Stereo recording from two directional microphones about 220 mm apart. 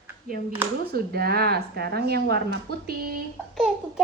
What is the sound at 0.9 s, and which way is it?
Speech, 45° right (ahead or behind).